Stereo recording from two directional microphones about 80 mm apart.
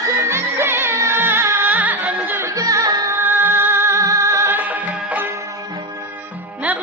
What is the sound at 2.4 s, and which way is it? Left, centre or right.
Music, right.